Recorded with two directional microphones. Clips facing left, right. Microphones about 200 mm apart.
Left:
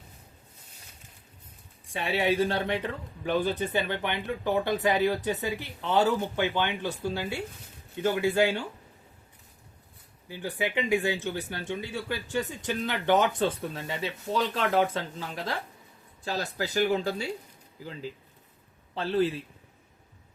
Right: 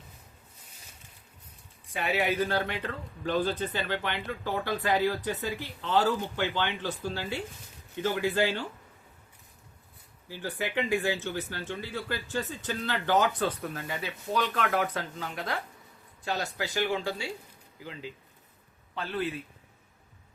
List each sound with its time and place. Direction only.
1.9 s speech: 25° left (ahead or behind); by 8.6 s 10° left (ahead or behind)
10.2 s speech: 15° left (ahead or behind)
16.2 s speech: 35° left (ahead or behind)
18.9 s speech: 30° left (ahead or behind)